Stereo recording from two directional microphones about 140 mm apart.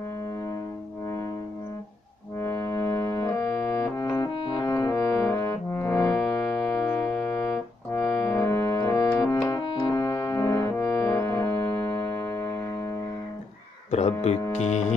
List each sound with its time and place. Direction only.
2.4 s music: 20° left (ahead or behind)
3.7 s brass instrument: 20° left (ahead or behind)
5.3 s music: 25° left (ahead or behind)
9.9 s brass instrument: 20° left (ahead or behind)
13.8 s music: 50° left (ahead or behind)